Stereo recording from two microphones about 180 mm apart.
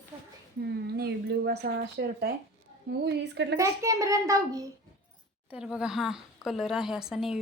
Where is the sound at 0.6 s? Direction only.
60° right (ahead or behind).